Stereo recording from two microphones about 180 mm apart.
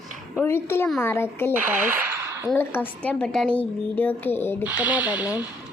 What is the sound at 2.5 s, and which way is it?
A woman's voice, 10° left (ahead or behind).